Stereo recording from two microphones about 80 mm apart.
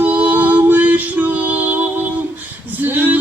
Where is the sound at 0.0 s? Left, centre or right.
Centre.